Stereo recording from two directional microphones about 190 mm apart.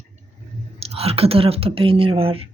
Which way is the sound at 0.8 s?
30° right (ahead or behind).